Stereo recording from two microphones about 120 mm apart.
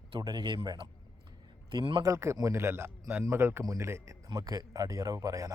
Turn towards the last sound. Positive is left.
turn(degrees=-25)  # may be behind; listen again after turning